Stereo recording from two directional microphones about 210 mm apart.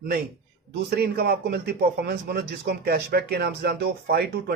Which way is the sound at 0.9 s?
45° right (ahead or behind).